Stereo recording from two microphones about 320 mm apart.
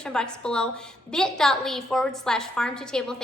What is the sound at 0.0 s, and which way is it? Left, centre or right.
A woman's voice, centre.